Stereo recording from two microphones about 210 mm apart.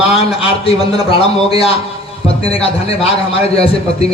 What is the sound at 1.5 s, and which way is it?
A man's voice, 30° left (ahead or behind).